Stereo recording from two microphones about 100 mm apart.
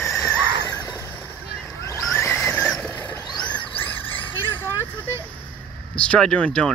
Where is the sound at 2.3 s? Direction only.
15° left (ahead or behind).